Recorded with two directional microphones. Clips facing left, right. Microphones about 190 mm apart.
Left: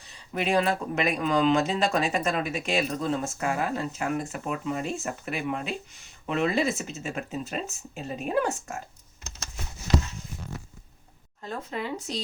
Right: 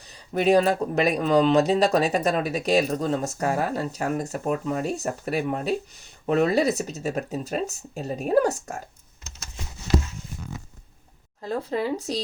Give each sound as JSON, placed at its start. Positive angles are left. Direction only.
{"t": 0.1, "sound": "speech", "side_deg": -40}
{"t": 11.4, "sound": "speech", "side_deg": -35}